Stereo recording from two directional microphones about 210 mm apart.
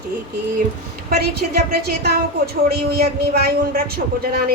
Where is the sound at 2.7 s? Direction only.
50° right (ahead or behind).